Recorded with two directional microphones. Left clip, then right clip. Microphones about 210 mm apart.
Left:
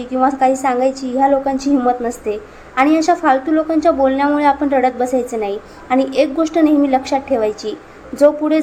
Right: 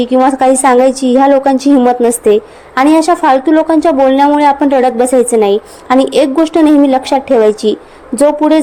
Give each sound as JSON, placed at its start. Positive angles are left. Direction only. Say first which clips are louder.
{"t": 0.0, "sound": "a woman's voice", "louder": "right 6 dB", "side_deg": -35}